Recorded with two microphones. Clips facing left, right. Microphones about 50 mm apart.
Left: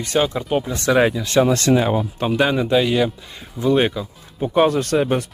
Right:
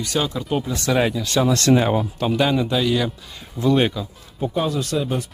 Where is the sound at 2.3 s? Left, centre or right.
Centre.